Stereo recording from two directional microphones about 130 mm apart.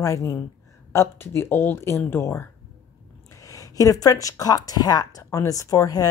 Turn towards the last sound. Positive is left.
turn(degrees=30)  # may be behind; listen again after turning